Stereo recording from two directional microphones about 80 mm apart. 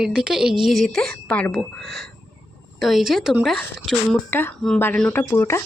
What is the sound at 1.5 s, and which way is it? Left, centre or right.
Speech, centre.